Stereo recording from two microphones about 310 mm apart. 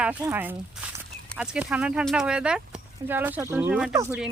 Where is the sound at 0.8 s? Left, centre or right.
Centre.